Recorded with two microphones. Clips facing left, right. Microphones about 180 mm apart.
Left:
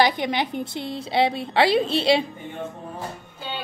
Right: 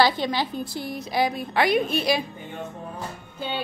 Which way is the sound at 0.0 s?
20° left (ahead or behind).